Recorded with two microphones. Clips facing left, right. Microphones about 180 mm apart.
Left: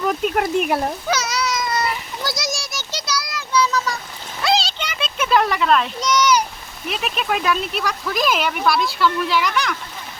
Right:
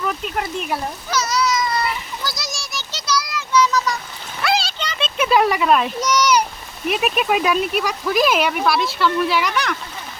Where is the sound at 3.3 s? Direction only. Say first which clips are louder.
Right 1 dB; 35° left (ahead or behind).